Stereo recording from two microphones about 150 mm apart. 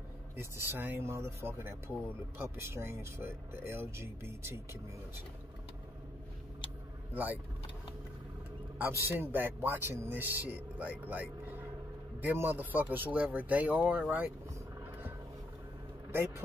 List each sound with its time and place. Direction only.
0.4 s speech: 15° right (ahead or behind)
8.7 s speech: 15° right (ahead or behind)
16.1 s a sound: 15° right (ahead or behind)